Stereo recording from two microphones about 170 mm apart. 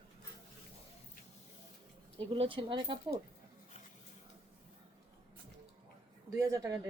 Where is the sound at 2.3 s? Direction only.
30° right (ahead or behind).